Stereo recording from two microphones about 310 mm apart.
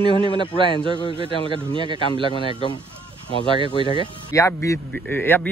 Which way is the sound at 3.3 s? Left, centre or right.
Centre.